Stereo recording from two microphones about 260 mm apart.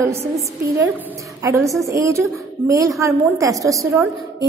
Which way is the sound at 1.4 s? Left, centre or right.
Centre.